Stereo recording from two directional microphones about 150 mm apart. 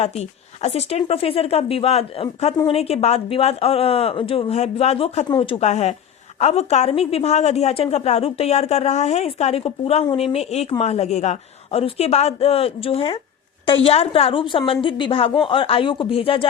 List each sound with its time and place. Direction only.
0.0 s a woman's voice: 45° left (ahead or behind)